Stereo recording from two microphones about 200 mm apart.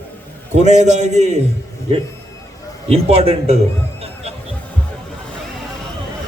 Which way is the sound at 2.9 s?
30° right (ahead or behind).